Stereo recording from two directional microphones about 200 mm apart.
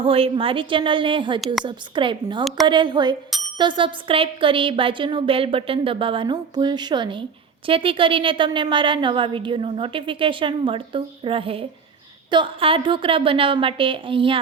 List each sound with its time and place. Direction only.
0.0 s a woman's voice: 25° right (ahead or behind)